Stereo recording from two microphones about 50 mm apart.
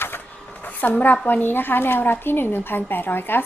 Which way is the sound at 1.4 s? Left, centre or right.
Left.